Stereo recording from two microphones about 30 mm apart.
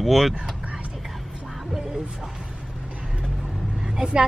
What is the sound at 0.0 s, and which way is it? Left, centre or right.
Speech, centre.